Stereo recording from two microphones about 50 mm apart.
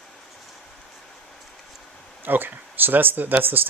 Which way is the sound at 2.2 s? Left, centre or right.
Right.